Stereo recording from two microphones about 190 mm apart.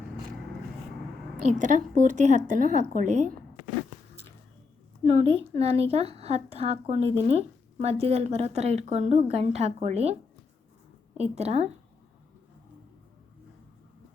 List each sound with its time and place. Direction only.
1.5 s a woman's voice: 40° right (ahead or behind)
5.0 s a woman's voice: 30° right (ahead or behind)
11.2 s a woman's voice: 35° right (ahead or behind)